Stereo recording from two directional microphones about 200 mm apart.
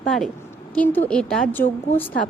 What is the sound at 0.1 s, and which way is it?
A woman's voice, centre (ahead or behind).